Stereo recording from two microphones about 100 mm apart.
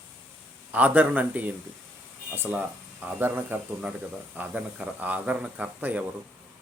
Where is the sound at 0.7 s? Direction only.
15° right (ahead or behind).